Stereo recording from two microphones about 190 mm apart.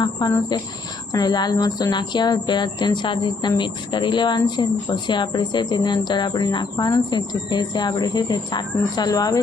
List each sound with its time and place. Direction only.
0.0 s speech: 20° left (ahead or behind)